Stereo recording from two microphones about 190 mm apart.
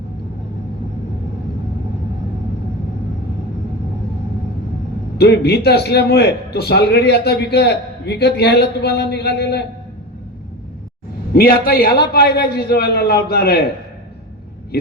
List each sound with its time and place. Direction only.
5.1 s a man's voice: 60° left (ahead or behind)
11.3 s a man's voice: 50° left (ahead or behind)